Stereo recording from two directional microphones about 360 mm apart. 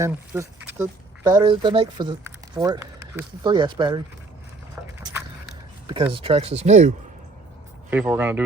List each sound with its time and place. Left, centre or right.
0.0 s speech: centre
5.9 s speech: centre
7.9 s a man's voice: centre